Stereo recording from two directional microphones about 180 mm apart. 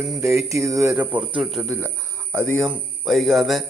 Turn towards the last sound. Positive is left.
turn(degrees=0)  # may be behind; listen again after turning